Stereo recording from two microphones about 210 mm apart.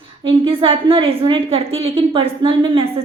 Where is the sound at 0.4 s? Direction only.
25° right (ahead or behind).